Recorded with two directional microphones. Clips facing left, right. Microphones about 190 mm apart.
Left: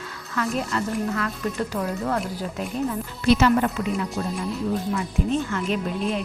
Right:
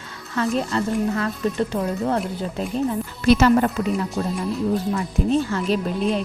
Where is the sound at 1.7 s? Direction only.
25° right (ahead or behind).